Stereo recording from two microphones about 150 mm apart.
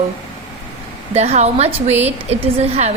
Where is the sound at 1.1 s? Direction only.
45° right (ahead or behind).